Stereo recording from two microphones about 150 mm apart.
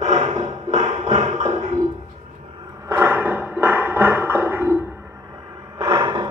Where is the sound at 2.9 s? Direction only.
15° right (ahead or behind).